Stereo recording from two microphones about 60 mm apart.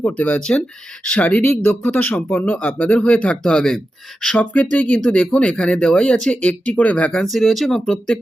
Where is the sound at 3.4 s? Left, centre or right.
Centre.